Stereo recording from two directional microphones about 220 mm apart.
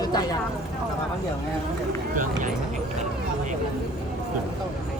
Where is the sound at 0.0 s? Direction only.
15° left (ahead or behind).